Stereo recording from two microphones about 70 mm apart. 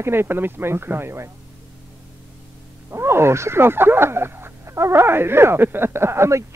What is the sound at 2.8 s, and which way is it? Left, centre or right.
Speech, right.